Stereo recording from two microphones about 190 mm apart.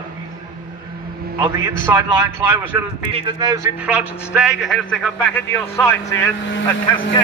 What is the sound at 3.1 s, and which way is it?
Speech, 25° right (ahead or behind).